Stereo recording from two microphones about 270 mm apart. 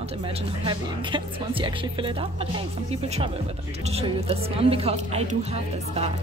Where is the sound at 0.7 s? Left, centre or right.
Centre.